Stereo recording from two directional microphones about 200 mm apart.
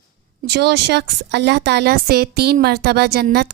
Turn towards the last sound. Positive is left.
turn(degrees=-55)  # may be behind; listen again after turning